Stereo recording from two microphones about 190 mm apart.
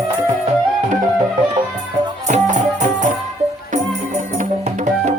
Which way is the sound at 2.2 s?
40° right (ahead or behind).